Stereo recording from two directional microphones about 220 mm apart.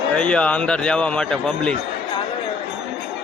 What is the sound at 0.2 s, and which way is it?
A man's voice, 5° left (ahead or behind).